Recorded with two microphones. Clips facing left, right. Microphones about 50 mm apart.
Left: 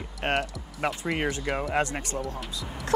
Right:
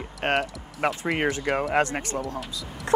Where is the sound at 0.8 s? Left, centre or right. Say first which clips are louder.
Right 3 dB; right.